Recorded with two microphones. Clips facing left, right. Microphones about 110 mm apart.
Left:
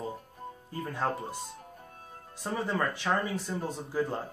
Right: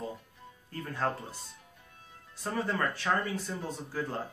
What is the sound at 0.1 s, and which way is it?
Music, 45° left (ahead or behind).